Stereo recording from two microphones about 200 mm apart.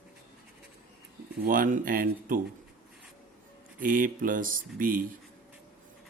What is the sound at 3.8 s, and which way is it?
Speech, 45° right (ahead or behind).